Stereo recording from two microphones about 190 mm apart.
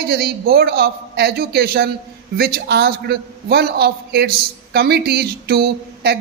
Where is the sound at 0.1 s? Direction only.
55° right (ahead or behind).